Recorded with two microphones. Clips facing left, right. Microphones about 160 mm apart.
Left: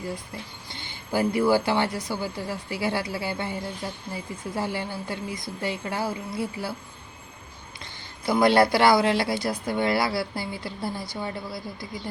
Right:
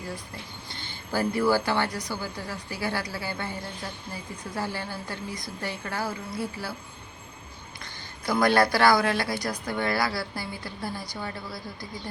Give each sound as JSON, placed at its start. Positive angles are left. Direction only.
{"t": 0.7, "sound": "a woman's voice", "side_deg": 20}
{"t": 4.5, "sound": "a woman's voice", "side_deg": 25}
{"t": 8.3, "sound": "a woman's voice", "side_deg": 25}